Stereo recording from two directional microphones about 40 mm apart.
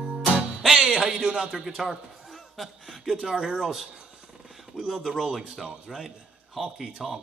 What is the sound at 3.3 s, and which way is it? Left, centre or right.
A man's voice, centre.